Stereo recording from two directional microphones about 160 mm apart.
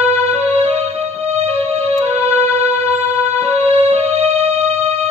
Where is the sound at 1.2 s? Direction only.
40° right (ahead or behind).